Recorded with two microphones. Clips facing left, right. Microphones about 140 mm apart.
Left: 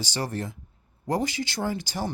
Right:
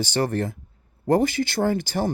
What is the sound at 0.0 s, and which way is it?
Speech, 60° right (ahead or behind).